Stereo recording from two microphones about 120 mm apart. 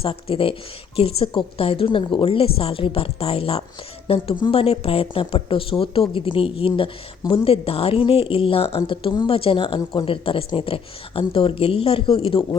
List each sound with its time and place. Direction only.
0.0 s speech: 50° left (ahead or behind)